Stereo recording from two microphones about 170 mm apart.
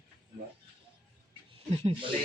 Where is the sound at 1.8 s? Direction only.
30° right (ahead or behind).